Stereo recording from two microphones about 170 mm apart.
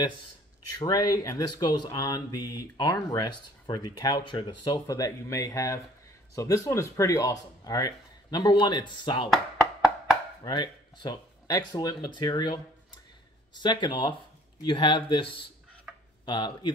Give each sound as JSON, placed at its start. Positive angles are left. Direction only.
{"t": 0.7, "sound": "speech", "side_deg": 20}
{"t": 10.4, "sound": "speech", "side_deg": 25}